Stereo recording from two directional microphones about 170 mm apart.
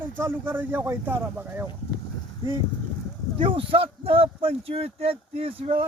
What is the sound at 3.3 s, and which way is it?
Speech, 30° right (ahead or behind).